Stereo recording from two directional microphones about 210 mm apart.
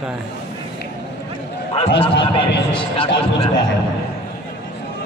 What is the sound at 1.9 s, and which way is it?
A man's voice, 25° left (ahead or behind).